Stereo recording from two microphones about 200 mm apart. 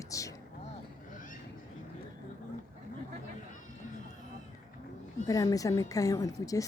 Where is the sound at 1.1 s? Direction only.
40° left (ahead or behind).